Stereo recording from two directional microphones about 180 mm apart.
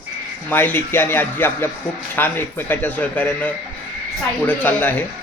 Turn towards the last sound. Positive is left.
turn(degrees=10)  # may be behind; listen again after turning